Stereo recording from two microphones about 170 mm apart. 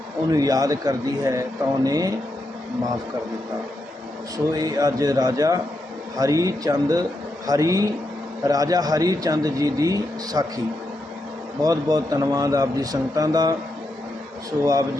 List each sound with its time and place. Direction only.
0.3 s a man's voice: 20° right (ahead or behind)
4.5 s a man's voice: 20° right (ahead or behind)
11.6 s a man's voice: 20° right (ahead or behind)
14.6 s a man's voice: 20° right (ahead or behind)